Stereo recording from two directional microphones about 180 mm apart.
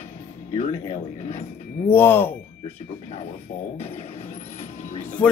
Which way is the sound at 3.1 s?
40° left (ahead or behind).